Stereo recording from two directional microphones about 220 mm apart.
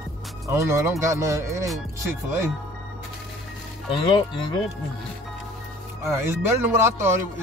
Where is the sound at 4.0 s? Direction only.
20° left (ahead or behind).